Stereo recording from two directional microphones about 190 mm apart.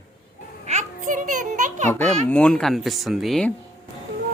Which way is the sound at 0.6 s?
40° right (ahead or behind).